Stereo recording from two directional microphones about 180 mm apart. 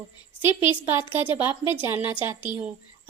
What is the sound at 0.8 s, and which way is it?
A woman's voice, 10° right (ahead or behind).